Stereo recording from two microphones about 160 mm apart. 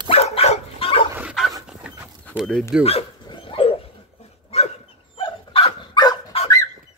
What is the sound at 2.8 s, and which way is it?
Dog, 35° left (ahead or behind).